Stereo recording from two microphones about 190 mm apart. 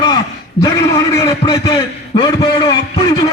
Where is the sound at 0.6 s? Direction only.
15° left (ahead or behind).